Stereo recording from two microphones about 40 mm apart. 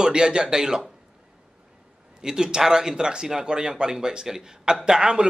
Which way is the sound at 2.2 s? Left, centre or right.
Centre.